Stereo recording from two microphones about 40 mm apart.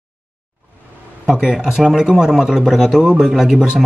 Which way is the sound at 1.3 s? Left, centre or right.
Centre.